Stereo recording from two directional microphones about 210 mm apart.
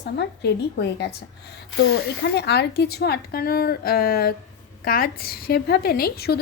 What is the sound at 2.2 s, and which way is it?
A woman's voice, 50° left (ahead or behind).